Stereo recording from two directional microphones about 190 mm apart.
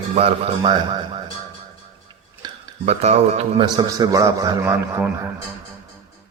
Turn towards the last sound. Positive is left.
turn(degrees=-15)  # may be behind; listen again after turning